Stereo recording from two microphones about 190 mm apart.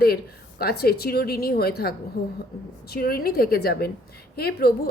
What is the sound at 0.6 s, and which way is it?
A woman's voice, 55° left (ahead or behind).